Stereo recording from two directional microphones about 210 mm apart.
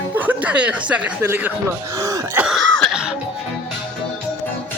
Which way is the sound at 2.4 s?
5° right (ahead or behind).